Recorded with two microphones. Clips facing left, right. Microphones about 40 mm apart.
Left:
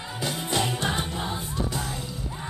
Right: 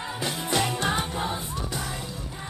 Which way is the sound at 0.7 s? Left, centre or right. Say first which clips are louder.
Right 1 dB; right.